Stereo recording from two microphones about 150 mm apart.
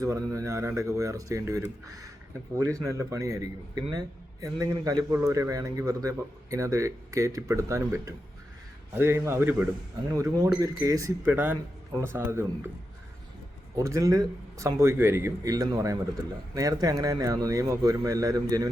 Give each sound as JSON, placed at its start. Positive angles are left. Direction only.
{"t": 0.0, "sound": "a man's voice", "side_deg": -20}
{"t": 13.7, "sound": "a man's voice", "side_deg": -20}